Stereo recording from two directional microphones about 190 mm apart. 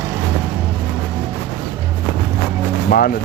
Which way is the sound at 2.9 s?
50° left (ahead or behind).